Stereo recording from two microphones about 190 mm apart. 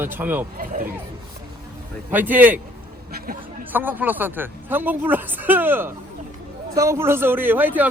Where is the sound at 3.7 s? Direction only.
10° right (ahead or behind).